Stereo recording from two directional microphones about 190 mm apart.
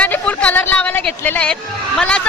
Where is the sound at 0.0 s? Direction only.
5° left (ahead or behind).